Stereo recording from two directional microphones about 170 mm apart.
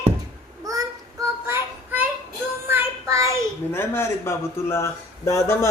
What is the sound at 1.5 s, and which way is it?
Child singing, 10° right (ahead or behind).